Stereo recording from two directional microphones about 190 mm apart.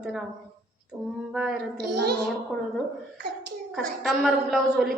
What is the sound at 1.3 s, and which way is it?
Speech, 5° right (ahead or behind).